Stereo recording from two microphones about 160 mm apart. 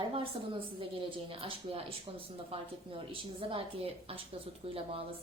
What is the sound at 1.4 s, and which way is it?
Speech, 35° right (ahead or behind).